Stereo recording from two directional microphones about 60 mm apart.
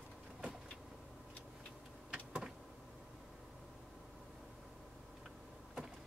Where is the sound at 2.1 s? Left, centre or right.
Centre.